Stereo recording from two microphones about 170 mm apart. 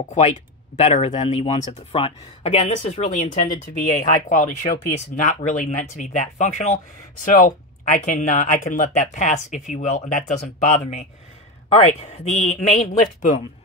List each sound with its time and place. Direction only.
0.7 s speech: 40° left (ahead or behind)